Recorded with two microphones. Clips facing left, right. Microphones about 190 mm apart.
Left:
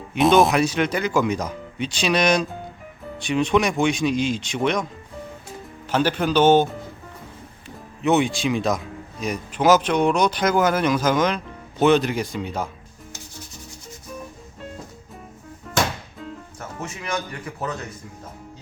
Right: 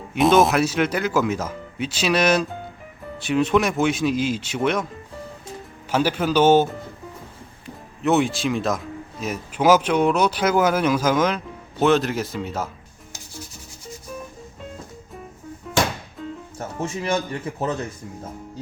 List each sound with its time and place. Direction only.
0.1 s speech: centre (ahead or behind)
5.9 s speech: 10° right (ahead or behind)
8.0 s speech: centre (ahead or behind)
15.7 s music: centre (ahead or behind)
16.6 s speech: 30° right (ahead or behind)